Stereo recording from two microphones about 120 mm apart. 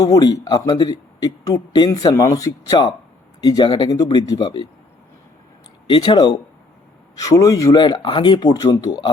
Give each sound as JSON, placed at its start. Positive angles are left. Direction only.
{"t": 0.0, "sound": "a man's voice", "side_deg": 30}
{"t": 5.9, "sound": "a man's voice", "side_deg": 40}